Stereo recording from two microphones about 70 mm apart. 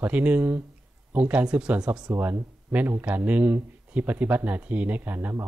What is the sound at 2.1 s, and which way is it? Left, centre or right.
A man's voice, right.